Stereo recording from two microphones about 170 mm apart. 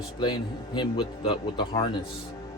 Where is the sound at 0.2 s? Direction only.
25° left (ahead or behind).